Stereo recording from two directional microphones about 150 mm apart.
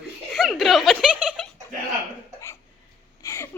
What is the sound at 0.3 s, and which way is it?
Giggle, centre (ahead or behind).